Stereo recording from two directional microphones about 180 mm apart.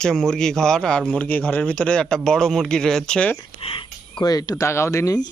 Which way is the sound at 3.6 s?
30° left (ahead or behind).